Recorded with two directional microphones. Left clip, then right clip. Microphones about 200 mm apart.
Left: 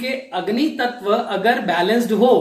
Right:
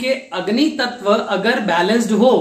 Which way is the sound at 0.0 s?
15° right (ahead or behind).